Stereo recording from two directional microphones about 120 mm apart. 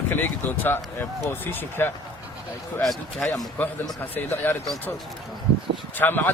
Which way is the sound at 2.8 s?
Centre (ahead or behind).